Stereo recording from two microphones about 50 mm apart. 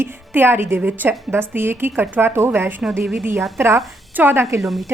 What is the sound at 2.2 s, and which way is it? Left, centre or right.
Speech, right.